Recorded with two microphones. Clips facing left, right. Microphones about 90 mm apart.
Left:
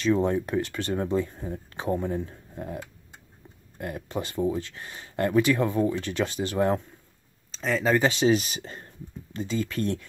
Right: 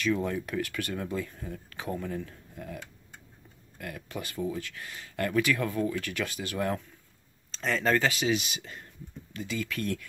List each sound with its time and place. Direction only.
0.0 s speech: 30° left (ahead or behind)
7.5 s speech: 5° left (ahead or behind)
8.1 s speech: 35° left (ahead or behind)